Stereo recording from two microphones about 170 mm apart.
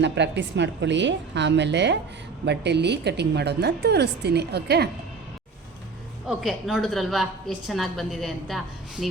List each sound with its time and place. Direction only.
0.0 s a woman's voice: 90° right; by 4.9 s 75° right (ahead or behind)
6.2 s a woman's voice: centre (ahead or behind)